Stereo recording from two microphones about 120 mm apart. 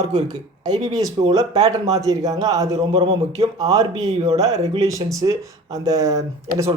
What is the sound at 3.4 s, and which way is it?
Speech, 55° right (ahead or behind).